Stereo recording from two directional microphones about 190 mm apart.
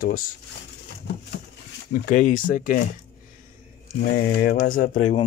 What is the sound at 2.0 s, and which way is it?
Speech, 45° left (ahead or behind).